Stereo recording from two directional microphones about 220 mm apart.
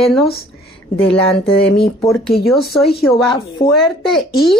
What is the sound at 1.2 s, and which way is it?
Speech, 5° left (ahead or behind).